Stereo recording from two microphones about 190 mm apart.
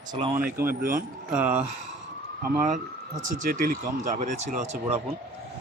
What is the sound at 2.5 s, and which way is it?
Speech, 40° right (ahead or behind).